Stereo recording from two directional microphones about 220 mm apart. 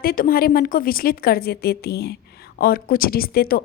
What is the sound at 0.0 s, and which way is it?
A woman's voice, 40° left (ahead or behind).